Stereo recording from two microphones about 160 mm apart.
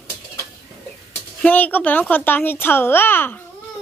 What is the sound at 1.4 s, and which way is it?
A child's voice, 10° left (ahead or behind).